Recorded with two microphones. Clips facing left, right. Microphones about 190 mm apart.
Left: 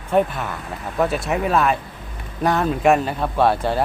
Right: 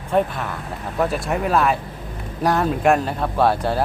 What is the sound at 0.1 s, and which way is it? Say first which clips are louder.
Speech: left 1 dB; centre (ahead or behind).